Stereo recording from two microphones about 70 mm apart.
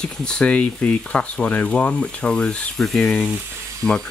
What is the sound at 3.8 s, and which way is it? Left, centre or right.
Speech, centre.